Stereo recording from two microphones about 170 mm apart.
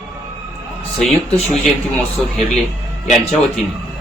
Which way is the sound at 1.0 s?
Centre (ahead or behind).